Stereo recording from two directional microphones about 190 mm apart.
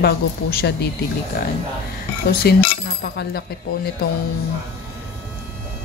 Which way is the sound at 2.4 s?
55° left (ahead or behind).